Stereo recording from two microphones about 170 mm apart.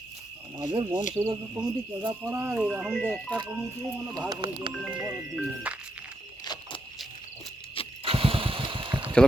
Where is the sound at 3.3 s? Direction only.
25° right (ahead or behind).